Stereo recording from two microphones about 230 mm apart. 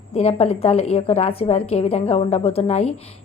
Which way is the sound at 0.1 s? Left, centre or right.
Left.